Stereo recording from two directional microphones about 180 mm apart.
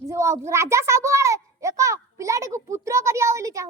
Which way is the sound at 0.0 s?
15° right (ahead or behind).